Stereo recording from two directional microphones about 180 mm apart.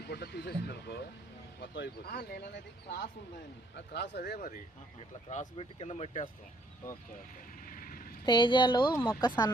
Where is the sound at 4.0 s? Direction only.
70° left (ahead or behind).